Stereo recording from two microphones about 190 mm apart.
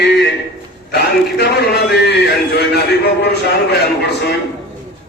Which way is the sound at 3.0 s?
60° left (ahead or behind).